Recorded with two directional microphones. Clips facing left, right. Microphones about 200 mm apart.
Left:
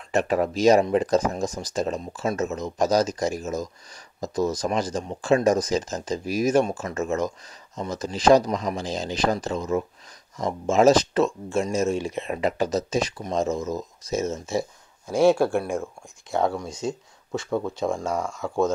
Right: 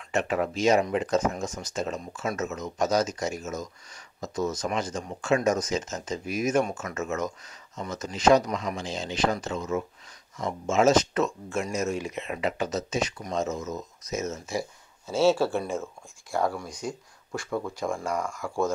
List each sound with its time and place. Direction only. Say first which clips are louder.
0.1 s speech: left 4 dB; 35° left (ahead or behind)
15.0 s speech: left 4 dB; 15° left (ahead or behind)